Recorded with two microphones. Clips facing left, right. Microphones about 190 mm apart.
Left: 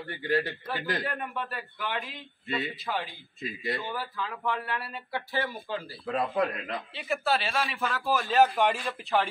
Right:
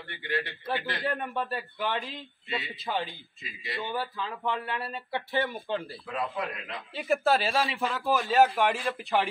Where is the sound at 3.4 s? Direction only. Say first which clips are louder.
Left 10 dB; 50° left (ahead or behind).